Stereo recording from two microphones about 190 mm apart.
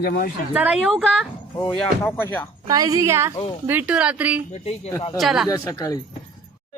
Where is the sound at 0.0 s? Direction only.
55° left (ahead or behind).